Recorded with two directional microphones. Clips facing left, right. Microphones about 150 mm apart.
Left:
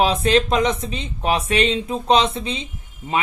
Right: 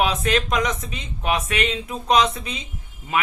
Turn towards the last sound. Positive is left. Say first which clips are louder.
# left 1 dB
turn(degrees=30)  # may be behind; listen again after turning